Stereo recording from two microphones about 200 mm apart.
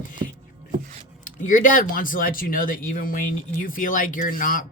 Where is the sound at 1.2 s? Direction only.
40° left (ahead or behind).